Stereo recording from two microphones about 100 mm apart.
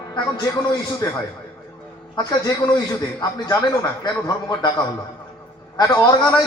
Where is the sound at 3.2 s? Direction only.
45° left (ahead or behind).